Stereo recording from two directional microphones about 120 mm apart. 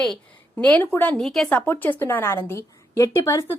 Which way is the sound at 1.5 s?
15° left (ahead or behind).